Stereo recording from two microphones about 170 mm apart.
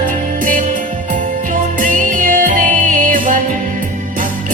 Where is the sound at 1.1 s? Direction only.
50° right (ahead or behind).